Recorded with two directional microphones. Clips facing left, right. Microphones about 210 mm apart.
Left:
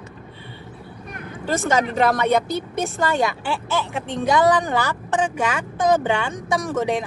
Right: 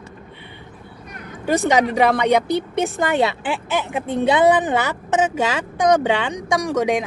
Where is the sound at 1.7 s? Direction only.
15° right (ahead or behind).